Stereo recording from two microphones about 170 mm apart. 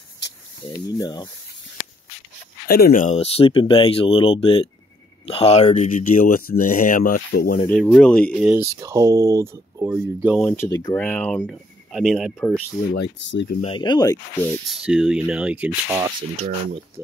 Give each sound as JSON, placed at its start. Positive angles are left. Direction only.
{"t": 0.7, "sound": "speech", "side_deg": 25}
{"t": 2.7, "sound": "speech", "side_deg": 55}
{"t": 7.6, "sound": "speech", "side_deg": 5}
{"t": 8.4, "sound": "speech", "side_deg": -5}
{"t": 8.8, "sound": "speech", "side_deg": -20}
{"t": 10.4, "sound": "speech", "side_deg": 10}
{"t": 10.7, "sound": "speech", "side_deg": 20}
{"t": 11.0, "sound": "speech", "side_deg": 10}
{"t": 12.9, "sound": "speech", "side_deg": 90}
{"t": 13.6, "sound": "speech", "side_deg": 30}
{"t": 14.7, "sound": "speech", "side_deg": 0}